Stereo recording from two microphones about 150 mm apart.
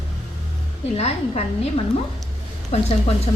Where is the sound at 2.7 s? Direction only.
45° left (ahead or behind).